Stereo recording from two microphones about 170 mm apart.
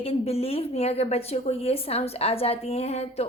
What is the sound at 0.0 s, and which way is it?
Speech, 35° left (ahead or behind).